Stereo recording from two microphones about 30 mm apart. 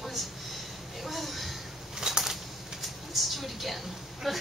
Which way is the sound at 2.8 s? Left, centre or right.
Centre.